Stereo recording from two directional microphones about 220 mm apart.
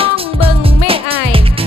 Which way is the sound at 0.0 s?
25° right (ahead or behind).